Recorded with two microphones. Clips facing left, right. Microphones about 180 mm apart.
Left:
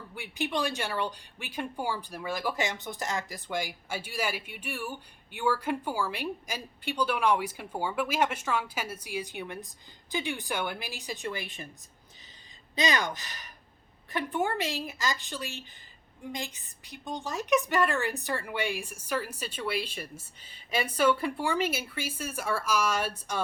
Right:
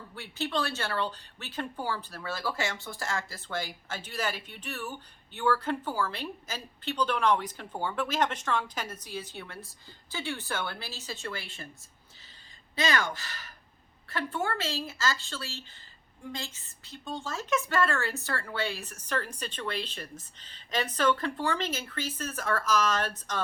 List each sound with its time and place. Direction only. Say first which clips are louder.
0.1 s speech: left 1 dB; 15° left (ahead or behind)
12.7 s speech: left 1 dB; 15° left (ahead or behind)